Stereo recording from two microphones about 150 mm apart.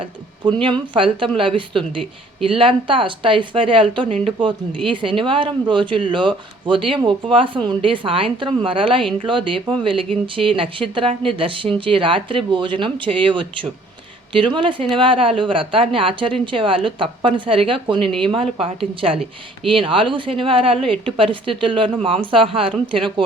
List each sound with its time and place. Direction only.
0.0 s speech: 35° right (ahead or behind)